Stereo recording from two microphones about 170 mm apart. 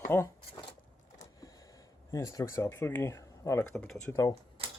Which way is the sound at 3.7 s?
Centre (ahead or behind).